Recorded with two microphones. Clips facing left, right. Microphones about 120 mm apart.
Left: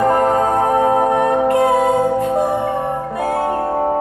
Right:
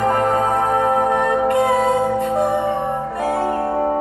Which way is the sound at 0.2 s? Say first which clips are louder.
Left 3 dB; 50° left (ahead or behind).